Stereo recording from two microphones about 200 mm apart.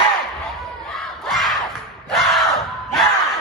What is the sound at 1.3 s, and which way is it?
Battle cry, centre (ahead or behind).